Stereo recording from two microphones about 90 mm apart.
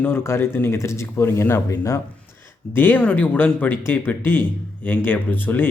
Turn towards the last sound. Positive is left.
turn(degrees=20)  # may be behind; listen again after turning